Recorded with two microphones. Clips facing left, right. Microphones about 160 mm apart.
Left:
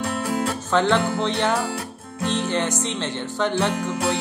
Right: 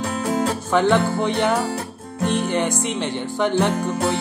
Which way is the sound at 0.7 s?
15° right (ahead or behind).